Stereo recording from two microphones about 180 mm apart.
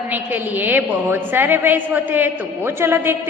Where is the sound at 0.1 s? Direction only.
10° right (ahead or behind).